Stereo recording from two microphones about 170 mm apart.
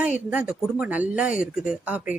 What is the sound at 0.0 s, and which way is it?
Speech, 5° right (ahead or behind).